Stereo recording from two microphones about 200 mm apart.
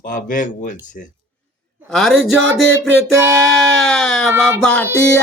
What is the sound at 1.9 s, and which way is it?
Speech, centre (ahead or behind).